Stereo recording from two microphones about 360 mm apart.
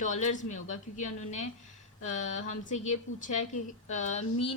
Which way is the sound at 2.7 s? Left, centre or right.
Centre.